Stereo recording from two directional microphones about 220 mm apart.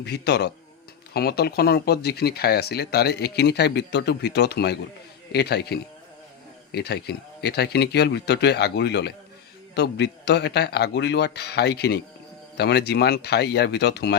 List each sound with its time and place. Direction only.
0.0 s speech: 50° left (ahead or behind)